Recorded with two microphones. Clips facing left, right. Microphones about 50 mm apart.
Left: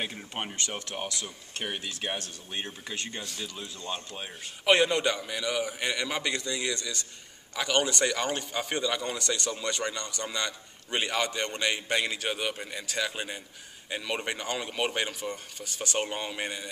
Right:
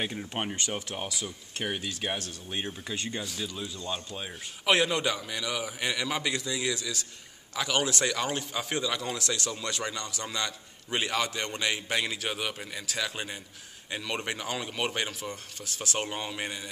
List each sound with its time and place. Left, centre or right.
0.0 s speech: centre
3.8 s speech: left
4.2 s speech: centre